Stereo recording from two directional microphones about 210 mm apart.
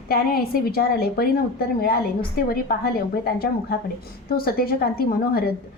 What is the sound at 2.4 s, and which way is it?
A woman's voice, 45° left (ahead or behind).